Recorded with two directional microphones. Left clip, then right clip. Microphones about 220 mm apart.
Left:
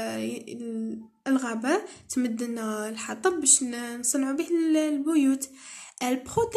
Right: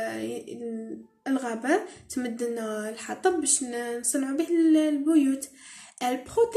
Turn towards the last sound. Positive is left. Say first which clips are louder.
# right 2 dB
turn(degrees=30)  # may be behind; listen again after turning